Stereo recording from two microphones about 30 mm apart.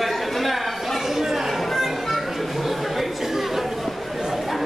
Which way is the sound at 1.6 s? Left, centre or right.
Centre.